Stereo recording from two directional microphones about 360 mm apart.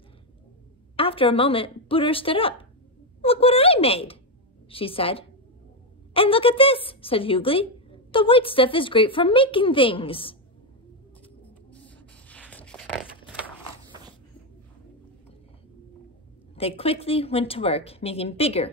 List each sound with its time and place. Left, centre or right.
0.9 s a woman's voice: centre
11.7 s a sound: centre
16.5 s a woman's voice: centre